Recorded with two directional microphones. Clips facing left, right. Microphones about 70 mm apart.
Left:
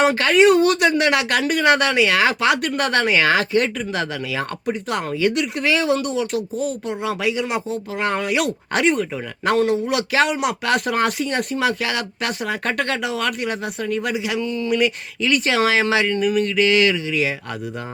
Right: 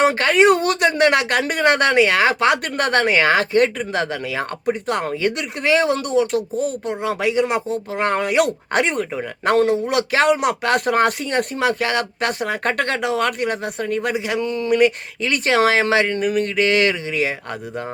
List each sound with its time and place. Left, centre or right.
0.0 s speech: right